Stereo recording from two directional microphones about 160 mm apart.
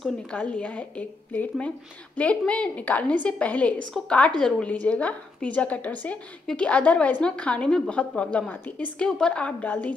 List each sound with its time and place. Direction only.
0.0 s a woman's voice: 5° left (ahead or behind)